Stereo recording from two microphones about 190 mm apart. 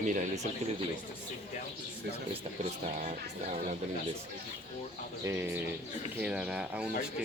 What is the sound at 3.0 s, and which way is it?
Speech, 40° right (ahead or behind).